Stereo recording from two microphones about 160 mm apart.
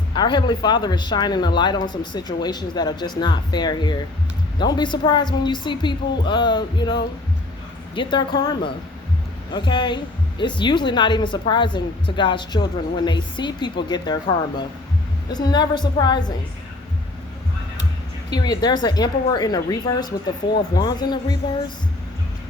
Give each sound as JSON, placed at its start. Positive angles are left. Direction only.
{"t": 0.1, "sound": "speech", "side_deg": 30}
{"t": 18.3, "sound": "speech", "side_deg": 25}